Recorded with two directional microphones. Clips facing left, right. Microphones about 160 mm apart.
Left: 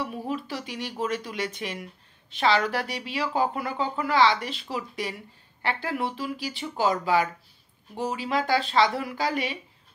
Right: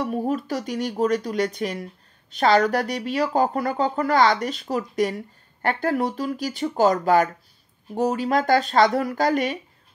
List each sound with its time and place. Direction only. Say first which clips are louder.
0.0 s speech: right 6 dB; 45° right (ahead or behind)